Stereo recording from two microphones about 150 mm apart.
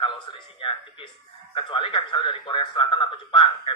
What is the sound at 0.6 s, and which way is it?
Speech, 35° left (ahead or behind).